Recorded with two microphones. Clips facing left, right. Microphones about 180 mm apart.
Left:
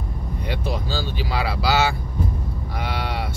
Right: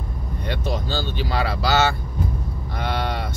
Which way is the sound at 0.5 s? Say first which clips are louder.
Right 1 dB; 10° left (ahead or behind).